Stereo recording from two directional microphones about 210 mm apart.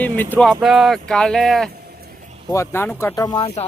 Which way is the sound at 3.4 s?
30° left (ahead or behind).